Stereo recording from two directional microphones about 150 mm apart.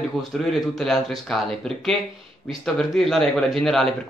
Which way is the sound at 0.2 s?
Centre (ahead or behind).